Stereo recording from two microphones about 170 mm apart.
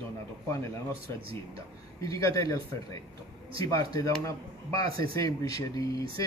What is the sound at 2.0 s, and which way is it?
Speech, 20° left (ahead or behind).